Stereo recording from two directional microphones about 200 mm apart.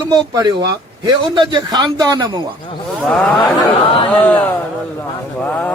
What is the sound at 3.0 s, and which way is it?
Speech, 5° left (ahead or behind).